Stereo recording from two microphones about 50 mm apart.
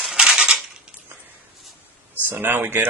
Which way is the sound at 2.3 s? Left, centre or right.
Right.